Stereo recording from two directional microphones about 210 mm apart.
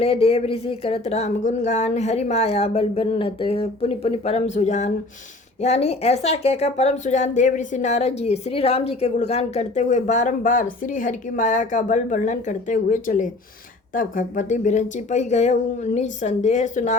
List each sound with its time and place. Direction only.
0.0 s speech: 30° left (ahead or behind)